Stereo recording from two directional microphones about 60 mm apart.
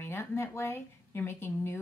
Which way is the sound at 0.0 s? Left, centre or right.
Left.